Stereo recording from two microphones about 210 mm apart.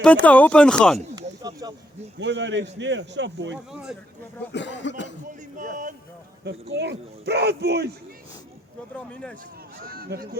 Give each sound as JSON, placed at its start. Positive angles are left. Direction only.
{"t": 0.0, "sound": "speech", "side_deg": 5}
{"t": 1.4, "sound": "a sound", "side_deg": -15}
{"t": 2.1, "sound": "speech", "side_deg": -60}
{"t": 3.7, "sound": "speech", "side_deg": -5}
{"t": 4.5, "sound": "speech", "side_deg": 60}
{"t": 5.5, "sound": "speech", "side_deg": -35}
{"t": 6.4, "sound": "speech", "side_deg": -55}
{"t": 9.8, "sound": "speech", "side_deg": -45}